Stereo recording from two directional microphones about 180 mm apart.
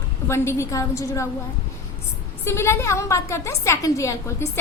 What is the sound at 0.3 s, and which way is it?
A woman's voice, 15° left (ahead or behind).